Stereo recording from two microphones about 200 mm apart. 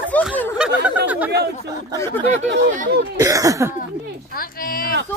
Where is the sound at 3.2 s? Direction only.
15° right (ahead or behind).